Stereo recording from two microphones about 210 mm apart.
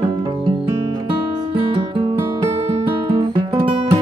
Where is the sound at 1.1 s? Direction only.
25° right (ahead or behind).